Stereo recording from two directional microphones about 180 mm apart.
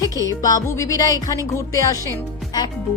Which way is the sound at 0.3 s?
20° left (ahead or behind).